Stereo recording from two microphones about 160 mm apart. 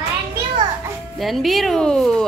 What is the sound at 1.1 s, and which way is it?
A woman's voice, centre (ahead or behind).